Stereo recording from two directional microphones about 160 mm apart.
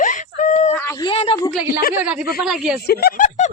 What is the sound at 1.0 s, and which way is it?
Speech, 35° left (ahead or behind).